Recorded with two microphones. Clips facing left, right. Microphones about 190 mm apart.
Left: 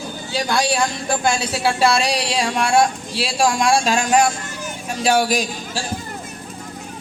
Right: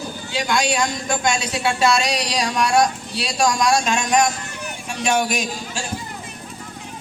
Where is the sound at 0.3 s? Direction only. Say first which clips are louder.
Left 1 dB; 35° left (ahead or behind).